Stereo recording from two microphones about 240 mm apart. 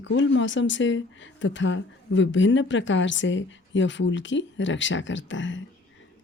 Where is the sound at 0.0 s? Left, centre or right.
Left.